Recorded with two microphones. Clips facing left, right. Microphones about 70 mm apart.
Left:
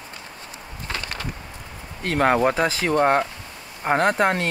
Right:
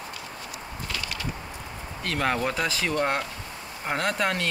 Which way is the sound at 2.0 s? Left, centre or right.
Left.